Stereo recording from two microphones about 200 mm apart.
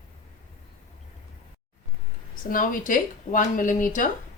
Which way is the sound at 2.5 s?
45° left (ahead or behind).